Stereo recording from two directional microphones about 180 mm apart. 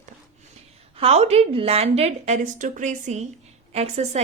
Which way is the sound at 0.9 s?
35° right (ahead or behind).